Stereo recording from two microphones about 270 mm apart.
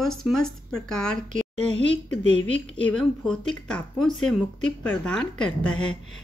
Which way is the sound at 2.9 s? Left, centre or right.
Centre.